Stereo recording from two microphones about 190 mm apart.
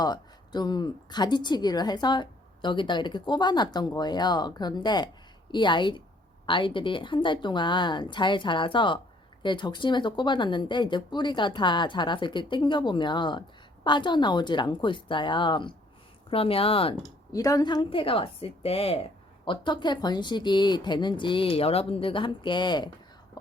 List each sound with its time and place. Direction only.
0.0 s a woman's voice: 20° left (ahead or behind)
17.3 s a woman's voice: 20° left (ahead or behind)